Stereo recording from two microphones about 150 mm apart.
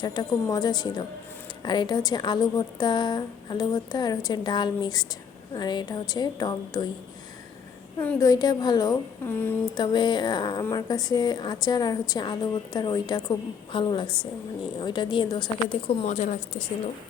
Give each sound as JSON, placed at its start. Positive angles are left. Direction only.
{"t": 0.0, "sound": "a woman's voice", "side_deg": 30}
{"t": 8.2, "sound": "a woman's voice", "side_deg": 25}
{"t": 9.2, "sound": "speech", "side_deg": 15}
{"t": 9.7, "sound": "a woman's voice", "side_deg": 30}
{"t": 16.0, "sound": "a woman's voice", "side_deg": 55}